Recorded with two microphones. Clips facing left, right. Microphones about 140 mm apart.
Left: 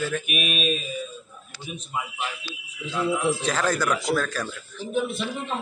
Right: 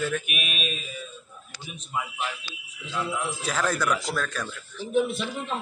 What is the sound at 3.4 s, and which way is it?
Speech, centre (ahead or behind).